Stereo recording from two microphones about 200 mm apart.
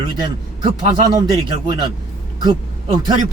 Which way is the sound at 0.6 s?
25° right (ahead or behind).